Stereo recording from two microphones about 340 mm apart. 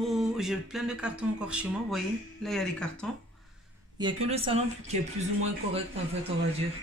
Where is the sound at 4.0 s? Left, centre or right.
Centre.